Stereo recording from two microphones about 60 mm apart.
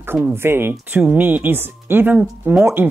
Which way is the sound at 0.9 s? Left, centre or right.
Right.